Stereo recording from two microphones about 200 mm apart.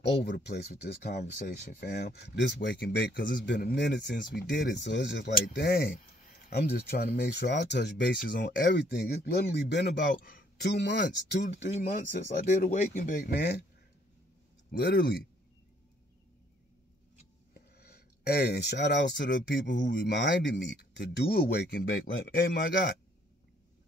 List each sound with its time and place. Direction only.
0.0 s speech: 60° left (ahead or behind)
12.4 s speech: 40° left (ahead or behind)
14.7 s speech: 50° left (ahead or behind)
17.6 s speech: 50° left (ahead or behind)